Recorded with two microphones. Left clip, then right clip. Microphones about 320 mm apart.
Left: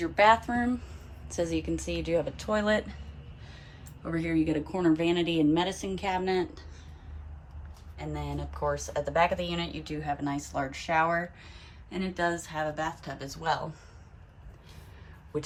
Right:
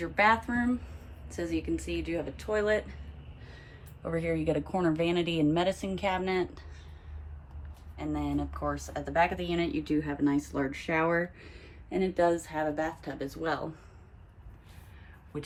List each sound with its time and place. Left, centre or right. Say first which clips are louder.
0.0 s speech: left 3 dB; centre
4.0 s a woman's voice: left 1 dB; centre
7.9 s speech: right 4 dB; centre